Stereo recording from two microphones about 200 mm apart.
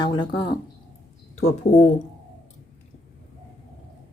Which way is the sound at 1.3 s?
35° left (ahead or behind).